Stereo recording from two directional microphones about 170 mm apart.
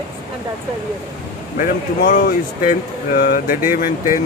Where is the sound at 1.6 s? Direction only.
50° left (ahead or behind).